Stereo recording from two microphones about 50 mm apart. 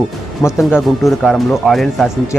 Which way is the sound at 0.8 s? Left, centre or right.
Centre.